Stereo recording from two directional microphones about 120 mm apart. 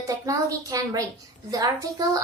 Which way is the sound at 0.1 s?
30° right (ahead or behind).